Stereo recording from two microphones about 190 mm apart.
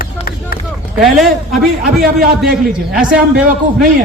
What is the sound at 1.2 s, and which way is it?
A man's voice, centre (ahead or behind).